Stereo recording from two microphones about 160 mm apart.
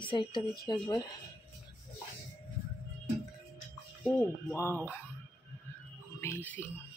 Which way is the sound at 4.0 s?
10° left (ahead or behind).